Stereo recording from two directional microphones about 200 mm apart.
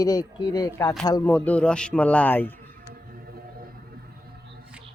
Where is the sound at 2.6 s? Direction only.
45° right (ahead or behind).